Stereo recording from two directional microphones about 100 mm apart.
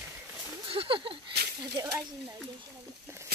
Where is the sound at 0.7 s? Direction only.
65° right (ahead or behind).